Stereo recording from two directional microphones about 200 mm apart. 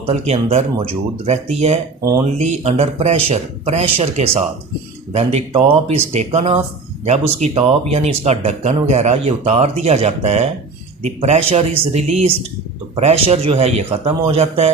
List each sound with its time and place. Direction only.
0.1 s speech: 35° right (ahead or behind)